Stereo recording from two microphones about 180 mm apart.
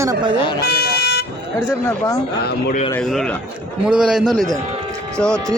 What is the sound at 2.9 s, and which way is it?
Speech, 5° left (ahead or behind).